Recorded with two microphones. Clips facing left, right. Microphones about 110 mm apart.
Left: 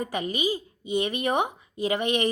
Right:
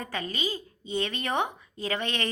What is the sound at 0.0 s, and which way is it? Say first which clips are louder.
A woman's voice: left 5 dB; 15° left (ahead or behind).